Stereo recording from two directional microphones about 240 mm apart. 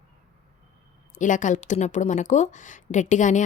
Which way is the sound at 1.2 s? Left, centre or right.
Left.